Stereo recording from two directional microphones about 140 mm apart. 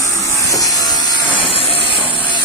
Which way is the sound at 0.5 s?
25° left (ahead or behind).